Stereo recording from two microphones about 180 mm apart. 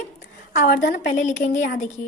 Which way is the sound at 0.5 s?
50° left (ahead or behind).